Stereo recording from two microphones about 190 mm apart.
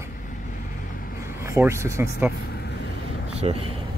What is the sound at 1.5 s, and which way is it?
Speech, 15° right (ahead or behind).